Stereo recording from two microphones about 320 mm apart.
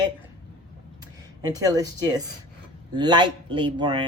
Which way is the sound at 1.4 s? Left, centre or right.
Centre.